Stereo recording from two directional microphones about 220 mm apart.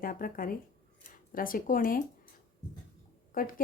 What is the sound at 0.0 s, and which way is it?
A woman's voice, 40° left (ahead or behind).